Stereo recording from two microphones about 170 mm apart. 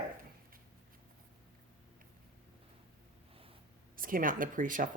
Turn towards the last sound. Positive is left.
turn(degrees=-50)  # may be behind; listen again after turning